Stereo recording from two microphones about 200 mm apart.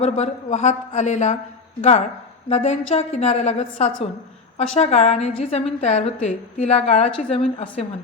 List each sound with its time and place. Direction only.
0.0 s a woman's voice: 35° left (ahead or behind)
2.5 s a woman's voice: 30° left (ahead or behind)